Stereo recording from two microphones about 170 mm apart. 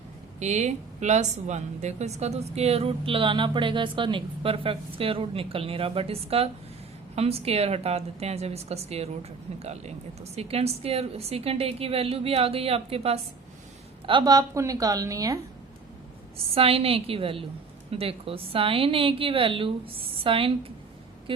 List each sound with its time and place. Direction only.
0.3 s a woman's voice: 40° right (ahead or behind)
14.1 s a woman's voice: 25° right (ahead or behind)
16.6 s a woman's voice: 35° right (ahead or behind)